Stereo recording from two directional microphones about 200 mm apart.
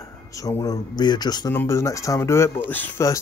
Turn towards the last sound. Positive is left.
turn(degrees=10)  # may be behind; listen again after turning